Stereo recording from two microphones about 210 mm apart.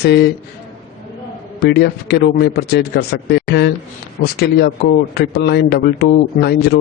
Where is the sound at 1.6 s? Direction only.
50° left (ahead or behind).